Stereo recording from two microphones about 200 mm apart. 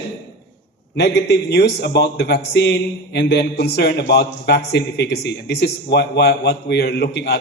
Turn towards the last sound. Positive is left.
turn(degrees=55)  # may be behind; listen again after turning